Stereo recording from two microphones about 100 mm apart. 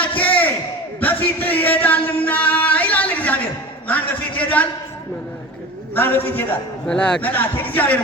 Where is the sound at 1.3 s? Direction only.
20° left (ahead or behind).